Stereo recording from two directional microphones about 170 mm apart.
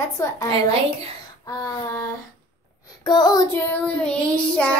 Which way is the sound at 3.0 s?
25° left (ahead or behind).